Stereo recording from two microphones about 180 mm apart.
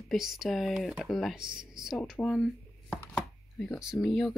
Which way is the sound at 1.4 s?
25° right (ahead or behind).